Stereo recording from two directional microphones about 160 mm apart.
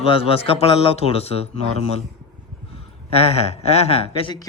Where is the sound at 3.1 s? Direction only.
40° left (ahead or behind).